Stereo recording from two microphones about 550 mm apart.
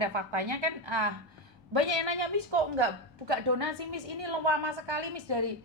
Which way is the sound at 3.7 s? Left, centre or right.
Right.